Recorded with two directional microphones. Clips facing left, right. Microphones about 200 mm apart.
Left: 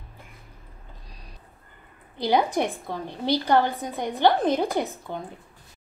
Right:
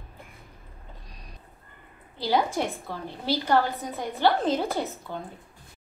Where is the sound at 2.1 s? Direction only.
20° left (ahead or behind).